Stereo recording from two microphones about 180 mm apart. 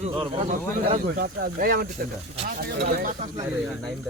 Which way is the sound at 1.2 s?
55° right (ahead or behind).